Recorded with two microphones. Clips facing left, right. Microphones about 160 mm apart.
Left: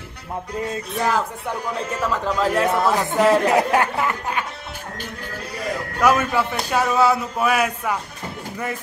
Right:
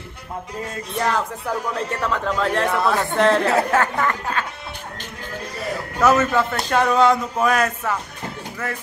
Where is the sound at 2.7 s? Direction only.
20° left (ahead or behind).